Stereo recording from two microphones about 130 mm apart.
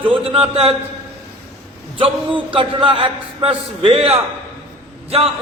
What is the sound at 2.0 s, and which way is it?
A man's voice, 40° right (ahead or behind).